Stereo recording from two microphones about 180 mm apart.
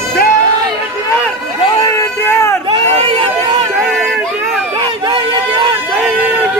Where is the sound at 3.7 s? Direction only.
Centre (ahead or behind).